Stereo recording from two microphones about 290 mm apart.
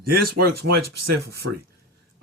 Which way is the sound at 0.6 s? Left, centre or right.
Right.